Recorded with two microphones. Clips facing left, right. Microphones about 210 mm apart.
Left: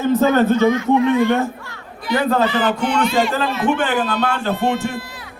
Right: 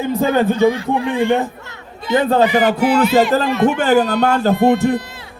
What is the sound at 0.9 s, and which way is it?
Speech, 30° right (ahead or behind).